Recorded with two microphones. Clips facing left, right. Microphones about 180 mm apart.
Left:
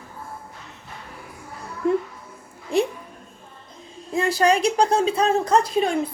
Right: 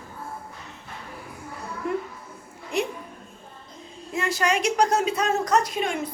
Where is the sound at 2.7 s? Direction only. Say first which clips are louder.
Left 6 dB; 30° left (ahead or behind).